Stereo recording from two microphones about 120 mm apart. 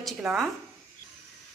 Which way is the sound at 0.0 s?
5° right (ahead or behind).